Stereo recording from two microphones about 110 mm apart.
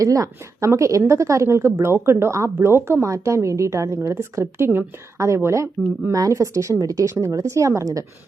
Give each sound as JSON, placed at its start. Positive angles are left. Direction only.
{"t": 0.0, "sound": "a woman's voice", "side_deg": -30}